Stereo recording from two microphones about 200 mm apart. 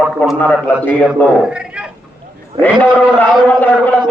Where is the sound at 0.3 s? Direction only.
5° left (ahead or behind).